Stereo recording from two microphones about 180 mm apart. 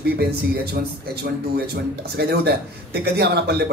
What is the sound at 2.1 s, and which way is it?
Speech, 65° right (ahead or behind).